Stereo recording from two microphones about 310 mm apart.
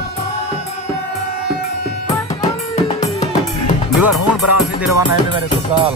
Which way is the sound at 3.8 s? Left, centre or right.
Centre.